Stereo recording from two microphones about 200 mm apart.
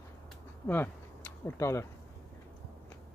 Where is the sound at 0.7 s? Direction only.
10° left (ahead or behind).